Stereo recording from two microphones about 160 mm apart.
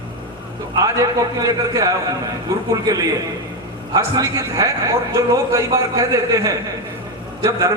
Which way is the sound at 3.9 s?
20° right (ahead or behind).